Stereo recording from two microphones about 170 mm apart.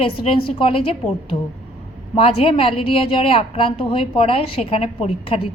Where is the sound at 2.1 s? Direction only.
35° left (ahead or behind).